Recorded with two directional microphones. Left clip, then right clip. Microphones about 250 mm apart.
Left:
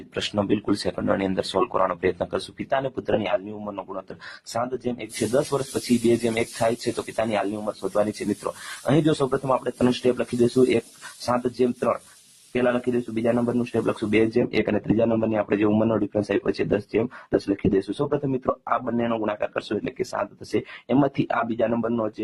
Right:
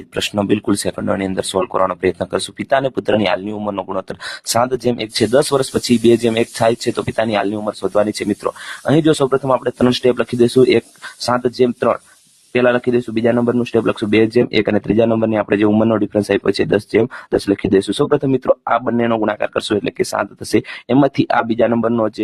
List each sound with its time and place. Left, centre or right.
0.1 s speech: right